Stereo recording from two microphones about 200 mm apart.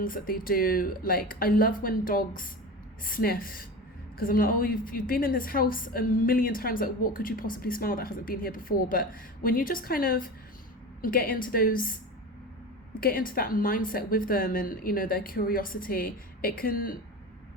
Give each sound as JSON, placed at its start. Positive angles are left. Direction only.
{"t": 0.0, "sound": "a woman's voice", "side_deg": 45}
{"t": 13.0, "sound": "a woman's voice", "side_deg": 45}